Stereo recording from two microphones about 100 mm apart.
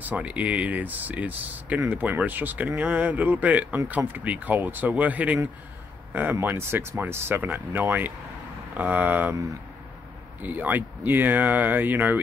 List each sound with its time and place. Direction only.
0.0 s speech: 15° right (ahead or behind)
6.4 s speech: 25° right (ahead or behind)
10.4 s speech: 15° right (ahead or behind)